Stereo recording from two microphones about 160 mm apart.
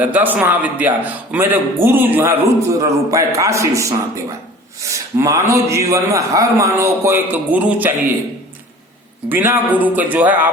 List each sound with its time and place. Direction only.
0.0 s a man's voice: 10° right (ahead or behind)
9.3 s a man's voice: 10° right (ahead or behind)